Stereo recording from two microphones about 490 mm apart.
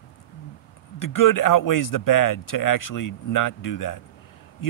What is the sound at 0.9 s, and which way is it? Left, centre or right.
Speech, left.